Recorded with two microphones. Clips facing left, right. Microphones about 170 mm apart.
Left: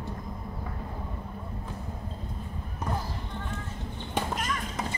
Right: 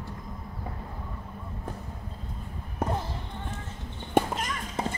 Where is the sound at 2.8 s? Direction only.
60° right (ahead or behind).